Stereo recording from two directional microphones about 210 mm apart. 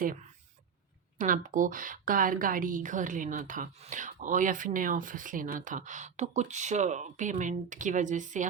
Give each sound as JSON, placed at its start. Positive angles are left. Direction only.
{"t": 0.0, "sound": "a woman's voice", "side_deg": -35}